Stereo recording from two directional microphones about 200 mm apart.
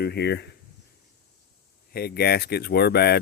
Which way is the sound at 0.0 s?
55° left (ahead or behind).